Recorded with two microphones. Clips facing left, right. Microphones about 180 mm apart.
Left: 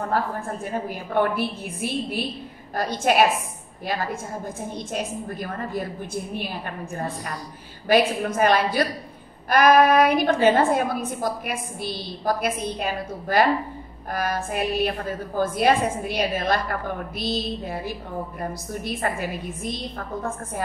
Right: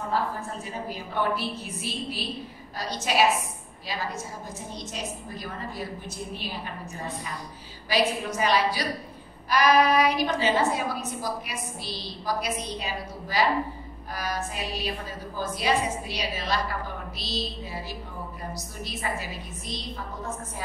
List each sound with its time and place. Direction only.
0.1 s a woman's voice: 55° left (ahead or behind)